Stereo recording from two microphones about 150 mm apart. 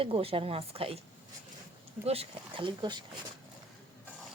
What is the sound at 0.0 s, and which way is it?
Speech, 40° right (ahead or behind).